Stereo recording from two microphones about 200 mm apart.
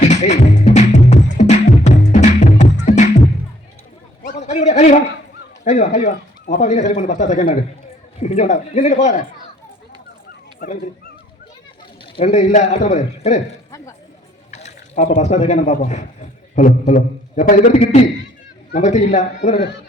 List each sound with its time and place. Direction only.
0.0 s music: 35° left (ahead or behind)
4.2 s a sound: 35° left (ahead or behind)
5.6 s a man's voice: 35° left (ahead or behind)
10.6 s speech: 45° left (ahead or behind)
12.1 s a man's voice: 35° left (ahead or behind)
13.7 s a sound: 15° left (ahead or behind)
14.5 s a man's voice: 35° left (ahead or behind)